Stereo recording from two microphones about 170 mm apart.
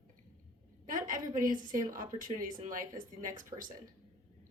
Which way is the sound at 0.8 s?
50° right (ahead or behind).